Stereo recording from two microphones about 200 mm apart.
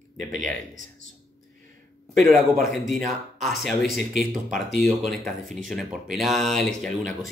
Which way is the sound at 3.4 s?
Centre (ahead or behind).